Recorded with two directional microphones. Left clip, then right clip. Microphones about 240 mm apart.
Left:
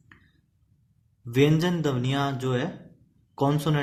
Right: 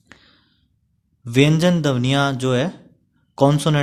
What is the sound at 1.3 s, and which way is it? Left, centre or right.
Speech, right.